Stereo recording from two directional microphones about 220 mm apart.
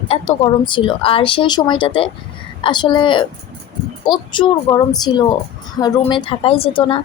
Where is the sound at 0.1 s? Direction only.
25° left (ahead or behind).